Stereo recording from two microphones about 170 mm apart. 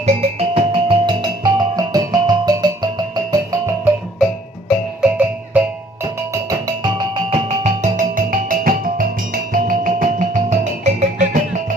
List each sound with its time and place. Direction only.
0.0 s music: 35° right (ahead or behind)
3.5 s music: 10° right (ahead or behind)
7.3 s music: 40° right (ahead or behind)